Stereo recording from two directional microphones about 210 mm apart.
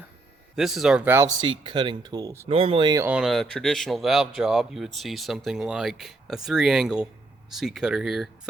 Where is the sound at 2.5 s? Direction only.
25° right (ahead or behind).